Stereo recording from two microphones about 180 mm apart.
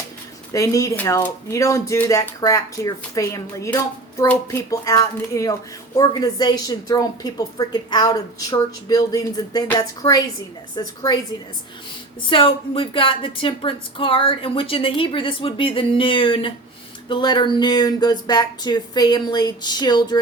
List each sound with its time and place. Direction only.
0.5 s speech: 20° left (ahead or behind)
12.3 s speech: 30° left (ahead or behind)